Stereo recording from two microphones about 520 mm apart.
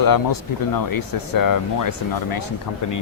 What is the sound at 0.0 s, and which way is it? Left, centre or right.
Speech, left.